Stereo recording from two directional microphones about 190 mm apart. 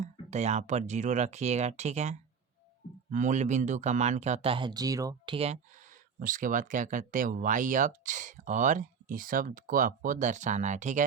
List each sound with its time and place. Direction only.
0.0 s speech: 35° right (ahead or behind)
6.1 s speech: 45° right (ahead or behind)